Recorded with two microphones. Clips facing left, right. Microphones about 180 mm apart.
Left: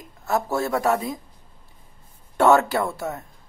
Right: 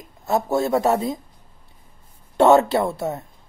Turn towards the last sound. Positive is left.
turn(degrees=-25)  # may be behind; listen again after turning